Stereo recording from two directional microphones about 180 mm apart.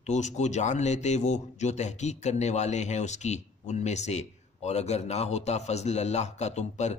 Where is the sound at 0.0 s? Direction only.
40° left (ahead or behind).